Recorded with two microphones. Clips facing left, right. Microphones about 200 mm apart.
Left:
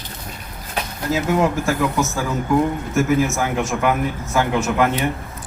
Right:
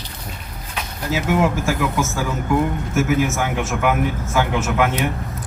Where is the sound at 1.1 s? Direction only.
5° right (ahead or behind).